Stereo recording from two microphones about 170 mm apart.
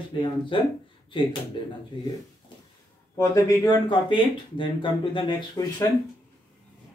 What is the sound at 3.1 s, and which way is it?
Speech, 20° left (ahead or behind).